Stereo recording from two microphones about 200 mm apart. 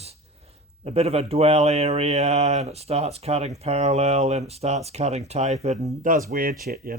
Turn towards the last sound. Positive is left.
turn(degrees=-45)  # may be behind; listen again after turning